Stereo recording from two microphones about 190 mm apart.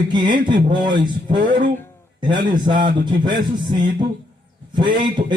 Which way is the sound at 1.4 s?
45° right (ahead or behind).